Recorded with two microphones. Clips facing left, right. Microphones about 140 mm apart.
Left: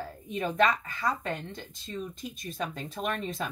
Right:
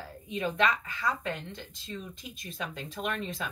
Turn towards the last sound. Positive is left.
turn(degrees=45)  # may be behind; listen again after turning